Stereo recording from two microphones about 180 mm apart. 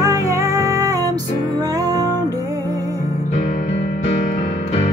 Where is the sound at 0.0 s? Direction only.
20° right (ahead or behind).